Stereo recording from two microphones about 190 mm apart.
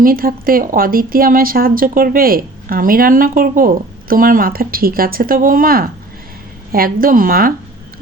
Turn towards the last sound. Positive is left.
turn(degrees=-50)  # may be behind; listen again after turning